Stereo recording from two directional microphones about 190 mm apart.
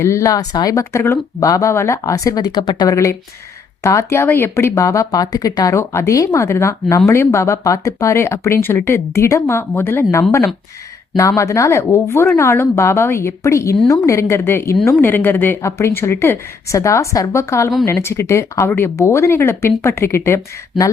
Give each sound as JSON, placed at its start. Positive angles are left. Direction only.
{"t": 0.0, "sound": "speech", "side_deg": 15}